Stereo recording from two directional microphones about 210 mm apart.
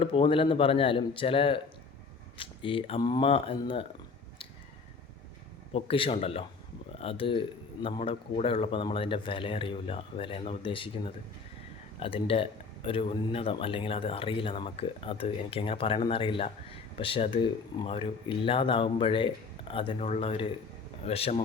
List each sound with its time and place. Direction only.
0.0 s speech: 25° left (ahead or behind)
5.7 s speech: 25° left (ahead or behind)